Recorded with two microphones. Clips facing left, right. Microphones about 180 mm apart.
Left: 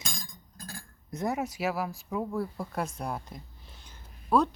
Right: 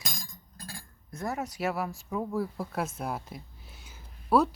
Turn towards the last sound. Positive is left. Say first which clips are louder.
# right 1 dB
turn(degrees=-5)  # may be behind; listen again after turning